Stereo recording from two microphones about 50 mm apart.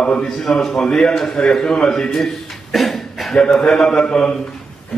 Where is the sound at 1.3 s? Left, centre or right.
Centre.